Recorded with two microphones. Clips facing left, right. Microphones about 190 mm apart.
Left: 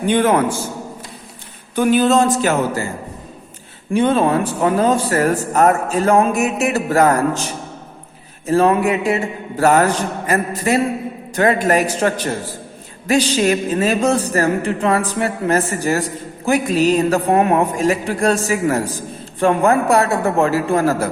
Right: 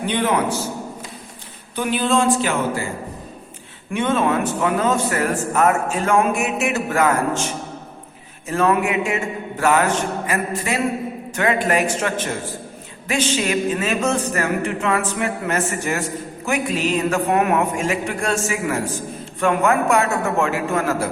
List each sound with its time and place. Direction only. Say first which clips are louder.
0.0 s a man's voice: left 5 dB; 45° left (ahead or behind)
1.7 s a man's voice: left 6 dB; 45° left (ahead or behind)
3.9 s a man's voice: left 4 dB; 35° left (ahead or behind)